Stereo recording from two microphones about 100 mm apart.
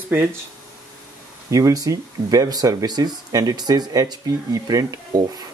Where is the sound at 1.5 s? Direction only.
35° right (ahead or behind).